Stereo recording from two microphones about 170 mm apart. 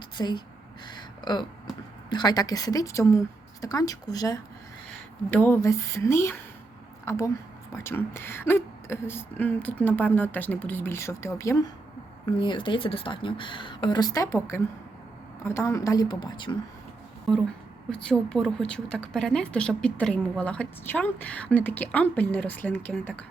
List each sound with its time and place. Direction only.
0.2 s a woman's voice: 25° left (ahead or behind)
0.9 s a sound: 25° left (ahead or behind)
2.0 s a woman's voice: 25° left (ahead or behind)
5.3 s a woman's voice: 10° left (ahead or behind)
12.4 s a woman's voice: 30° left (ahead or behind)
17.3 s a woman's voice: centre (ahead or behind)